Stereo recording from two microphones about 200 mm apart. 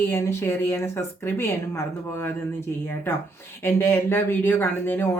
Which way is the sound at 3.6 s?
10° left (ahead or behind).